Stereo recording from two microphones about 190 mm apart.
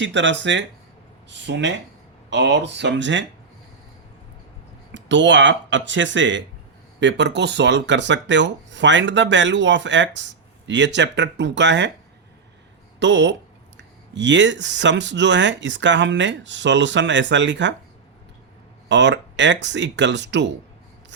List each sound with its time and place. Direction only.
0.0 s speech: 70° right (ahead or behind)
4.9 s speech: 70° right (ahead or behind)
13.0 s speech: 70° right (ahead or behind)
18.9 s speech: 70° right (ahead or behind)